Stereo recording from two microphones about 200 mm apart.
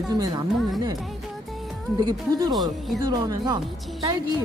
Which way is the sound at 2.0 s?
20° right (ahead or behind).